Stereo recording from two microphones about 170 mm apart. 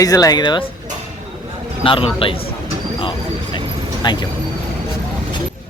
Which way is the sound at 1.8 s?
30° left (ahead or behind).